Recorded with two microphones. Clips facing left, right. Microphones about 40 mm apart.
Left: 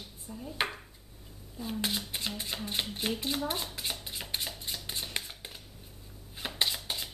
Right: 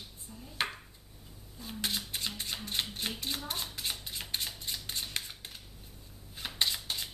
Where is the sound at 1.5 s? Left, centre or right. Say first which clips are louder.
Left 3 dB; centre.